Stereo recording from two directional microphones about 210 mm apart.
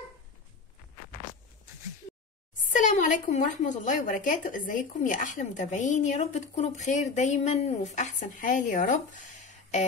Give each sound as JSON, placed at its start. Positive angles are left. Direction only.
{"t": 2.6, "sound": "a woman's voice", "side_deg": 40}